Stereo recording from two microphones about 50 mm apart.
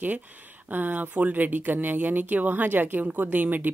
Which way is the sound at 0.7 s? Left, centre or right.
Right.